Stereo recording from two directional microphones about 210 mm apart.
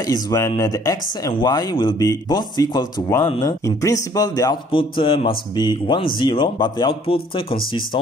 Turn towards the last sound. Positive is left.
turn(degrees=25)  # may be behind; listen again after turning